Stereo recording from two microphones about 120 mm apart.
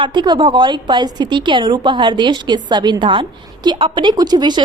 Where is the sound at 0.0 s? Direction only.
40° right (ahead or behind).